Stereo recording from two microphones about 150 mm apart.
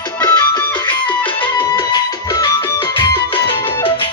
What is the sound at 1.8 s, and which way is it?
Music, 25° left (ahead or behind).